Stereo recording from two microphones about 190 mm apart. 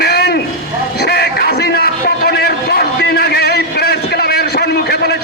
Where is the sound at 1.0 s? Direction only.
55° left (ahead or behind).